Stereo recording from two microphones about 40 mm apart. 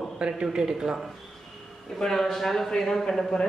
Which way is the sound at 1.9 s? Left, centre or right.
Centre.